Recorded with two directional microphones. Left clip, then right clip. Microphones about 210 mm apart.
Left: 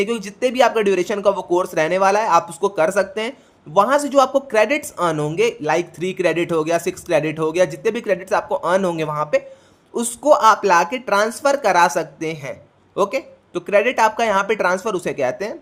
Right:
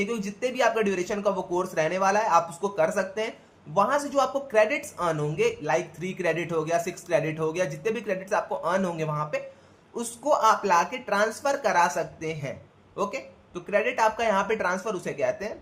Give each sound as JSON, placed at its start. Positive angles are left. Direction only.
{"t": 0.0, "sound": "speech", "side_deg": 45}